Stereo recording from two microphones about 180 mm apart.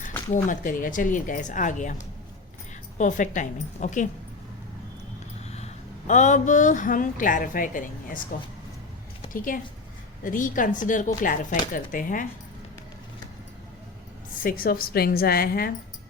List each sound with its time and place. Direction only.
0.3 s speech: 45° left (ahead or behind)
5.5 s speech: 35° left (ahead or behind)
9.3 s speech: 50° left (ahead or behind)
14.4 s a woman's voice: 50° left (ahead or behind)